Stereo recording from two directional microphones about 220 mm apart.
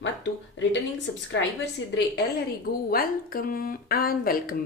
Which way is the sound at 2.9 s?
40° left (ahead or behind).